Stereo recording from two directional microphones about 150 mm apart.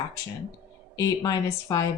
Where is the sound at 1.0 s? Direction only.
20° left (ahead or behind).